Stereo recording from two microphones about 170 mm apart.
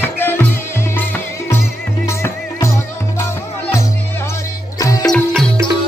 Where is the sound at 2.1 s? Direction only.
15° left (ahead or behind).